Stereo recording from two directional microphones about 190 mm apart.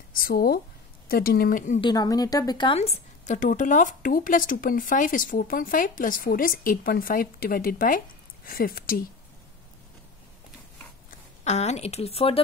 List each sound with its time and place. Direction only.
0.1 s speech: 50° left (ahead or behind)
1.8 s speech: 20° left (ahead or behind); by 9.0 s 50° left (ahead or behind)
11.1 s speech: 35° left (ahead or behind)